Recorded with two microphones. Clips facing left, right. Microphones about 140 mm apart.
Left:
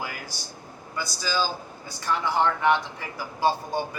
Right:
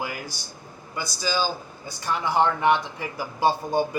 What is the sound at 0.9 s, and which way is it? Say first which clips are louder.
Speech: right 1 dB; 20° right (ahead or behind).